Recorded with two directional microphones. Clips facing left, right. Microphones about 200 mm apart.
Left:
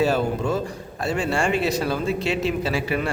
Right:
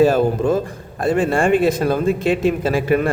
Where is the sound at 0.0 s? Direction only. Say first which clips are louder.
Right 7 dB; 50° right (ahead or behind).